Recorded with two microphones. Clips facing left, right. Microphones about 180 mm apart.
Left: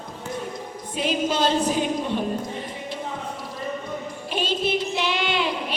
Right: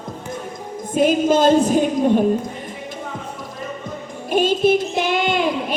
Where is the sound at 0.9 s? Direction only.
50° right (ahead or behind).